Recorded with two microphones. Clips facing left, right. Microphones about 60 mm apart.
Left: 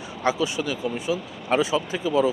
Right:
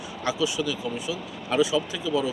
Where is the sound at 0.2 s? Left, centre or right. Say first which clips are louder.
Left 3 dB; left.